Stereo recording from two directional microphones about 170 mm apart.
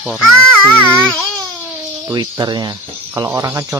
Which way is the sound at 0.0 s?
5° right (ahead or behind).